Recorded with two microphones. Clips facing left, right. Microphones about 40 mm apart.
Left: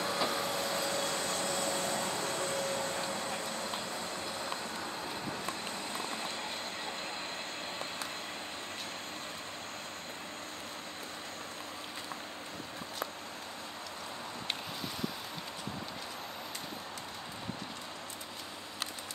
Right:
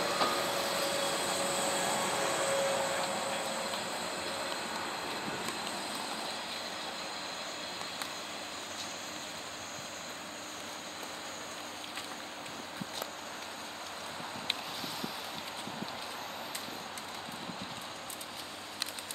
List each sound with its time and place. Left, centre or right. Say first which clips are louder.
0.0 s train: right 2 dB; centre; by 5.4 s right